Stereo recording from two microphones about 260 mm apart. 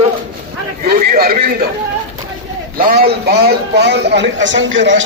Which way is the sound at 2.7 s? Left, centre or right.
Right.